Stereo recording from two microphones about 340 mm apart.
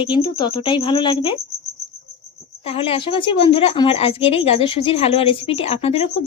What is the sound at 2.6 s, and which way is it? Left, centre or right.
Speech, centre.